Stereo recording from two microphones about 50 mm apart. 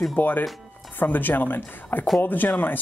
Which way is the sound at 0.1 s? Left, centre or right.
Left.